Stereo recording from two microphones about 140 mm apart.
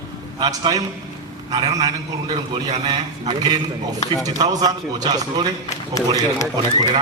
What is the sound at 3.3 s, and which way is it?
Speech, 30° right (ahead or behind).